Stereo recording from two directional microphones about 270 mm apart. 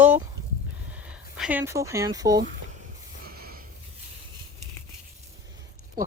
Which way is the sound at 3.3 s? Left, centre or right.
Right.